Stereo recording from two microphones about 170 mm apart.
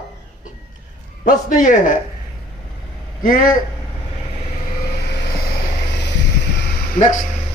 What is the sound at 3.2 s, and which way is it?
Speech, 55° left (ahead or behind).